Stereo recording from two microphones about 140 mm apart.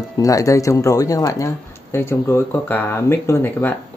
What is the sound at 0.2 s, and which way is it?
Speech, 25° left (ahead or behind).